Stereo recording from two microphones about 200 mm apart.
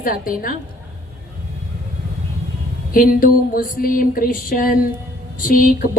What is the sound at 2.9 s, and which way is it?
A woman's voice, 45° left (ahead or behind).